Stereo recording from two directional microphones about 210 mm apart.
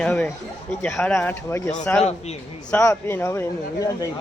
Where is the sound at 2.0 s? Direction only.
30° left (ahead or behind).